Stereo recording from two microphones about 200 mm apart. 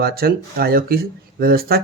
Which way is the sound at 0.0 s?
50° right (ahead or behind).